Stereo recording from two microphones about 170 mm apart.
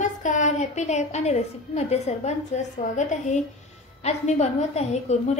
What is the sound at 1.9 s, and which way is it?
A woman's voice, 40° left (ahead or behind).